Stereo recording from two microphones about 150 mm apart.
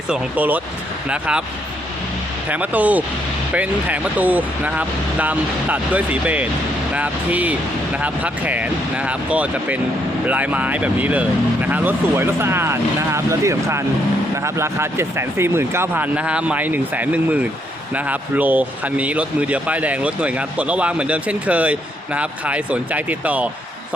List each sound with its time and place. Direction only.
0.1 s speech: 10° right (ahead or behind)
2.5 s speech: 10° right (ahead or behind)